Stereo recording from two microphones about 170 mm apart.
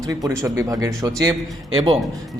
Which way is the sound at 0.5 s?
20° right (ahead or behind).